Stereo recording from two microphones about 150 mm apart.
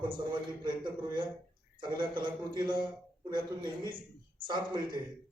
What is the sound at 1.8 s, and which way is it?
A man's voice, 30° right (ahead or behind).